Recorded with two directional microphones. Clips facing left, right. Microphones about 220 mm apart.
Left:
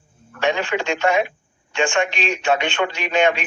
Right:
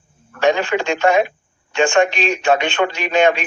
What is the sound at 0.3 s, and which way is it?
A man's voice, 40° right (ahead or behind).